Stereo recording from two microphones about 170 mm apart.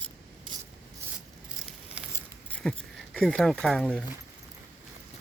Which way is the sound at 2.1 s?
5° left (ahead or behind).